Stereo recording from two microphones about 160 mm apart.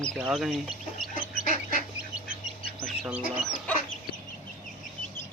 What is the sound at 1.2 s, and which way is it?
Duck, 55° left (ahead or behind).